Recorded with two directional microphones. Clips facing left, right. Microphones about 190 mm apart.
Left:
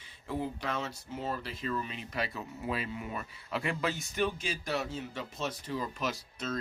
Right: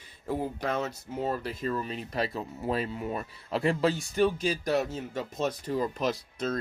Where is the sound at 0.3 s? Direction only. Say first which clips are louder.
Right 4 dB; 45° right (ahead or behind).